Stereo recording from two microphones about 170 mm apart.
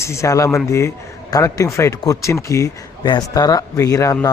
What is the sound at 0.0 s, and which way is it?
A man's voice, 15° left (ahead or behind).